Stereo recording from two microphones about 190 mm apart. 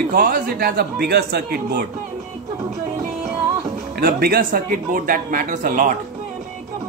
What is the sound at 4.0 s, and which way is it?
Speech, 50° right (ahead or behind).